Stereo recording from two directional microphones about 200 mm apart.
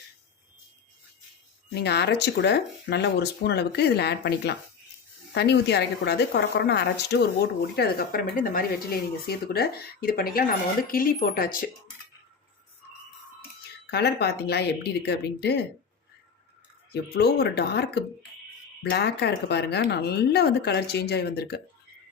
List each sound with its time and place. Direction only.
1.8 s speech: 55° left (ahead or behind)
13.9 s speech: 55° left (ahead or behind)
16.9 s speech: 50° left (ahead or behind)